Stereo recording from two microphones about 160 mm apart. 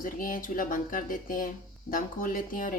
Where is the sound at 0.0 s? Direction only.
60° left (ahead or behind).